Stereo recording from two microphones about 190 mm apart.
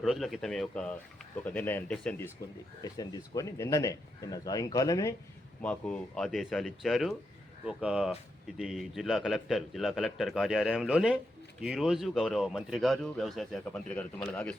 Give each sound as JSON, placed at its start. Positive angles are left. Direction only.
{"t": 0.0, "sound": "speech", "side_deg": 0}
{"t": 2.8, "sound": "speech", "side_deg": 20}
{"t": 5.6, "sound": "speech", "side_deg": 5}